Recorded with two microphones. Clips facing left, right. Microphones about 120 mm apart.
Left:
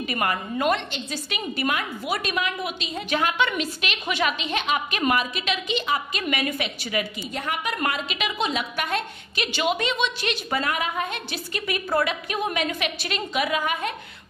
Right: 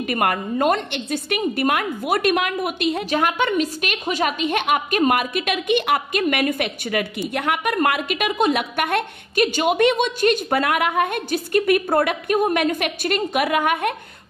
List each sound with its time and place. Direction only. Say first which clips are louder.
0.0 s a woman's voice: right 5 dB; 55° right (ahead or behind)
6.2 s a woman's voice: right 6 dB; 45° right (ahead or behind)